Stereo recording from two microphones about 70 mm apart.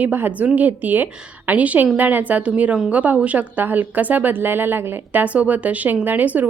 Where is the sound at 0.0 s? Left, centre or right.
Right.